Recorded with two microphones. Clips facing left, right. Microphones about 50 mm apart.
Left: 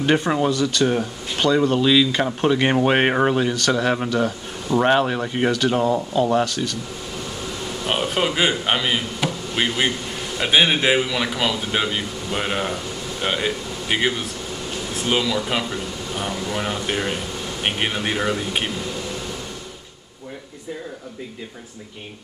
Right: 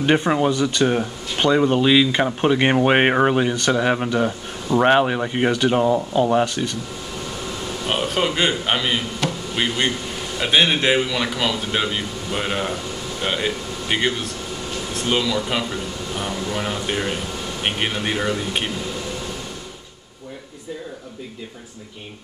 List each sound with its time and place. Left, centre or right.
0.0 s speech: centre
7.8 s speech: centre